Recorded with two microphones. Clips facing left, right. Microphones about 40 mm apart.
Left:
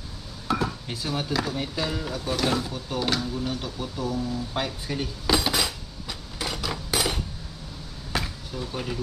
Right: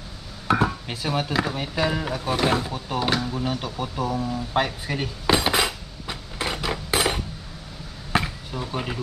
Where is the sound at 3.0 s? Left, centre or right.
Right.